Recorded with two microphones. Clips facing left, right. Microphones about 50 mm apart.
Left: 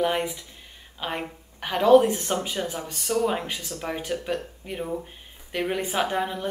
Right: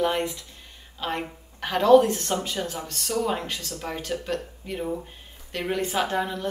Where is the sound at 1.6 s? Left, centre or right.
Centre.